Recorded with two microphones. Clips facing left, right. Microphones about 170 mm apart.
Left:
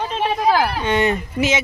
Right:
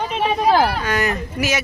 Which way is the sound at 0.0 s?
15° right (ahead or behind).